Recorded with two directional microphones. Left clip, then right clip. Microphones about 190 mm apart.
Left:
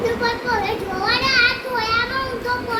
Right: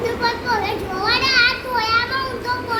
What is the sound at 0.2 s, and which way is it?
Children playing, 60° right (ahead or behind).